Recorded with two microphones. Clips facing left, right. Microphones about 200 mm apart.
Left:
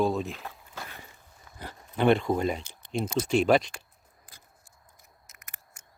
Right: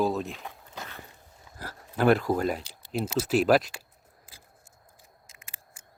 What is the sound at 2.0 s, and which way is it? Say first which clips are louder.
Speech: even; centre (ahead or behind).